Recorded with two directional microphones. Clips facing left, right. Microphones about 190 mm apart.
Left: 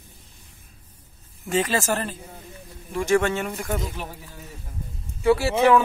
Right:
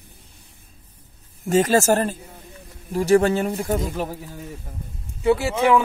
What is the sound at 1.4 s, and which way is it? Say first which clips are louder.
Speech: right 6 dB; 45° right (ahead or behind).